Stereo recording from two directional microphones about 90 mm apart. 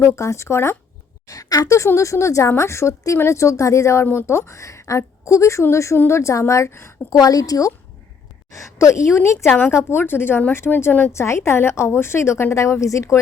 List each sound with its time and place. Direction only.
0.0 s a woman's voice: 30° left (ahead or behind)
1.3 s a woman's voice: 45° left (ahead or behind)
7.1 s a woman's voice: 40° left (ahead or behind)
9.5 s a woman's voice: 20° left (ahead or behind); by 13.1 s 35° left (ahead or behind)